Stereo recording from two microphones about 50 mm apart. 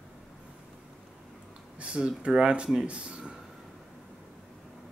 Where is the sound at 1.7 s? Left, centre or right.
Right.